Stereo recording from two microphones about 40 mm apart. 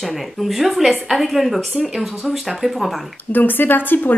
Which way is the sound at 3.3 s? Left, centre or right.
Left.